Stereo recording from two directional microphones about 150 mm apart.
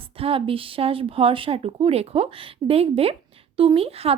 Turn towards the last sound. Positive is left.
turn(degrees=-40)  # may be behind; listen again after turning